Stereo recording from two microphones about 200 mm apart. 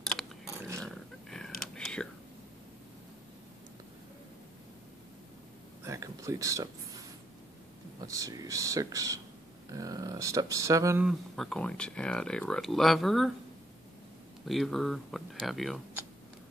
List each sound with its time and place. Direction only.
0.8 s roaring cats: 5° left (ahead or behind)
1.8 s whispering: 5° left (ahead or behind)
5.9 s a sound: 15° right (ahead or behind)
8.0 s speech: 15° right (ahead or behind)
11.1 s speech: centre (ahead or behind)
14.4 s speech: centre (ahead or behind)